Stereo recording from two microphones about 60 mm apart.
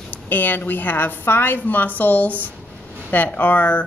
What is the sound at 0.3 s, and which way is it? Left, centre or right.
Speech, left.